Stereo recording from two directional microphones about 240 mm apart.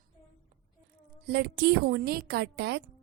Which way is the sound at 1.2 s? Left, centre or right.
Right.